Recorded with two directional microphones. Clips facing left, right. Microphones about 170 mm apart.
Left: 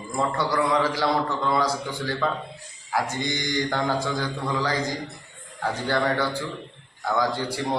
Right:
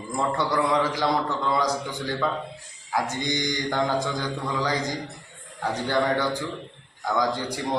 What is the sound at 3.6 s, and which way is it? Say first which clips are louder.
A man's voice: right 2 dB; 15° right (ahead or behind).